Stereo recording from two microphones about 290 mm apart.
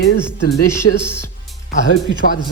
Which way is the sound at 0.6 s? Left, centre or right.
Centre.